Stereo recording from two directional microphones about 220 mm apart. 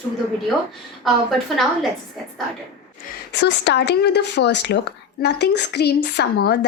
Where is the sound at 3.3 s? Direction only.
50° left (ahead or behind).